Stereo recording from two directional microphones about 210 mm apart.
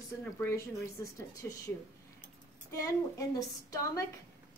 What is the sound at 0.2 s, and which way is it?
A woman's voice, 10° left (ahead or behind).